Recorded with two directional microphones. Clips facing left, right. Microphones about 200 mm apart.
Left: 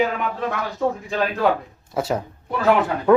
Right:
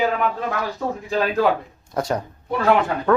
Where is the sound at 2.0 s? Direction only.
5° left (ahead or behind).